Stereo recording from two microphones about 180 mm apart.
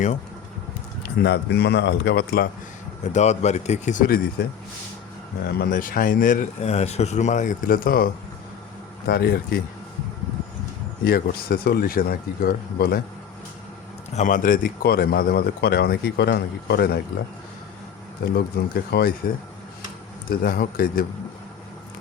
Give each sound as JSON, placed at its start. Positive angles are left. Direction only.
{"t": 1.0, "sound": "a man's voice", "side_deg": 70}
{"t": 3.0, "sound": "speech", "side_deg": 40}
{"t": 5.5, "sound": "speech", "side_deg": 55}
{"t": 11.0, "sound": "speech", "side_deg": 60}
{"t": 14.1, "sound": "speech", "side_deg": 45}
{"t": 18.3, "sound": "speech", "side_deg": 65}
{"t": 20.3, "sound": "speech", "side_deg": 55}